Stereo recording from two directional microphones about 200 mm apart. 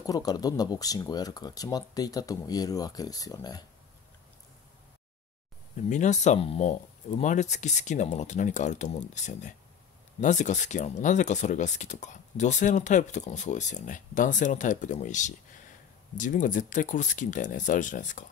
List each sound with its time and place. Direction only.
0.0 s speech: 20° left (ahead or behind)
5.9 s speech: 35° left (ahead or behind)